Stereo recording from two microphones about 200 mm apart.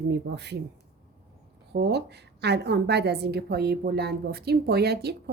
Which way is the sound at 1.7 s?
55° right (ahead or behind).